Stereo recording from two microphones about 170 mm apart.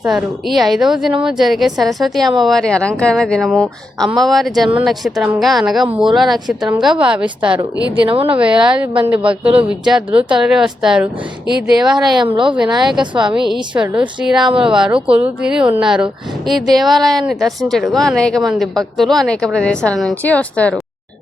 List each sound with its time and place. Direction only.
0.0 s speech: 5° right (ahead or behind)
8.0 s speech: 30° right (ahead or behind)
8.4 s speech: 5° right (ahead or behind)
11.8 s speech: 25° right (ahead or behind)
13.7 s speech: 15° right (ahead or behind)
14.2 s speech: 5° right (ahead or behind)